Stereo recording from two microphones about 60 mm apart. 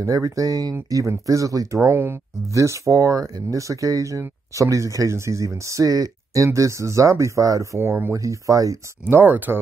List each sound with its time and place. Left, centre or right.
0.0 s speech: right
7.8 s speech: right
8.1 s speech: right
9.1 s speech: right